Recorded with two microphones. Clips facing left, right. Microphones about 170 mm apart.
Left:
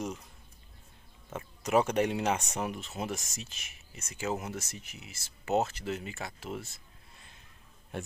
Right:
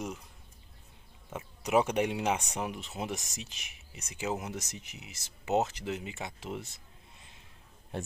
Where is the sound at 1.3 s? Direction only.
15° right (ahead or behind).